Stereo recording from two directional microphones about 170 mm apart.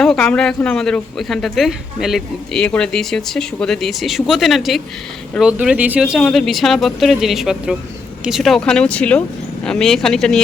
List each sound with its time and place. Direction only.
0.0 s speech: 5° left (ahead or behind)